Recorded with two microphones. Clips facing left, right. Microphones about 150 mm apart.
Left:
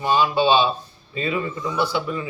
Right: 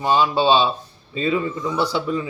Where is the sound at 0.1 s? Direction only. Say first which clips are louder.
Right 1 dB; 35° right (ahead or behind).